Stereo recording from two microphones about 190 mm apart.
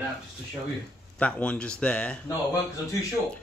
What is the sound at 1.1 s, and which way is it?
Speech, 5° left (ahead or behind).